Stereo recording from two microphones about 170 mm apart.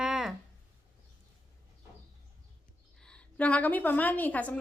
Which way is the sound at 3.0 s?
5° left (ahead or behind).